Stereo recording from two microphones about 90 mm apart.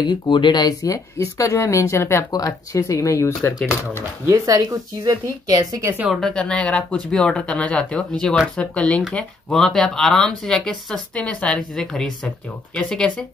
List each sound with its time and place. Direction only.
0.0 s speech: 60° left (ahead or behind); by 4.0 s 30° left (ahead or behind)
4.3 s speech: 40° right (ahead or behind)
6.3 s speech: 10° left (ahead or behind)